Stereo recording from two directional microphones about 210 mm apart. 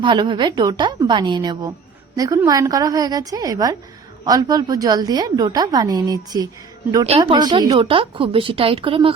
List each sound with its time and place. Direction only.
0.0 s a woman's voice: 25° right (ahead or behind)